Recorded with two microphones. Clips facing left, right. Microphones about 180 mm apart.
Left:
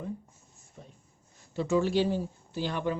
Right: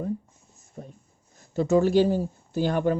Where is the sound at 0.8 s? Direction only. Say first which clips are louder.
Right 9 dB; 45° right (ahead or behind).